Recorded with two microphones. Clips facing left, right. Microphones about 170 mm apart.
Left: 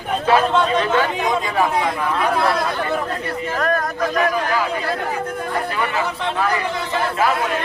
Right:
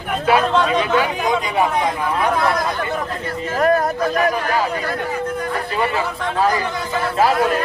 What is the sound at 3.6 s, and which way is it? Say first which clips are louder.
Speech: right 5 dB; 30° right (ahead or behind).